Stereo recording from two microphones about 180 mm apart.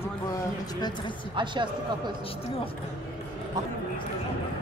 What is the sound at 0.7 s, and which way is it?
Speech, 25° left (ahead or behind).